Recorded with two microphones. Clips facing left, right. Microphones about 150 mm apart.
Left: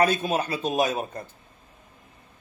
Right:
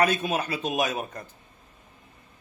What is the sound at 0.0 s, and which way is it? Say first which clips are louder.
Speech: left 2 dB; 30° left (ahead or behind).